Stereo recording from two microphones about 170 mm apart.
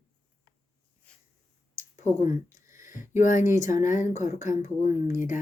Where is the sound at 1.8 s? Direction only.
45° left (ahead or behind).